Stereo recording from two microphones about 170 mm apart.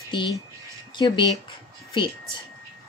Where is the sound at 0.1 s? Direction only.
25° left (ahead or behind).